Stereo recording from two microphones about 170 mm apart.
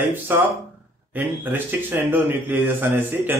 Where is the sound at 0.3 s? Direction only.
10° right (ahead or behind).